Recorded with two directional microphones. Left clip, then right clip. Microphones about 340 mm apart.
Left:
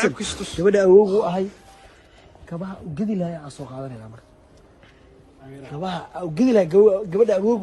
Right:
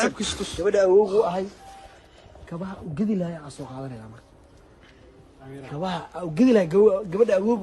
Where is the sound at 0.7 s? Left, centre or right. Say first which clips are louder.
Left 4 dB; left.